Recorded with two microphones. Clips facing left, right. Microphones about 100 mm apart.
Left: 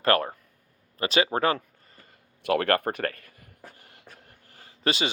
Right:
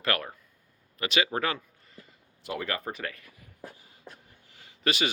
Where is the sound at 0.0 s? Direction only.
35° left (ahead or behind).